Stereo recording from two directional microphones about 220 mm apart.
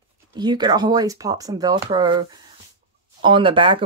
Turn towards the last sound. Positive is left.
turn(degrees=-25)  # may be behind; listen again after turning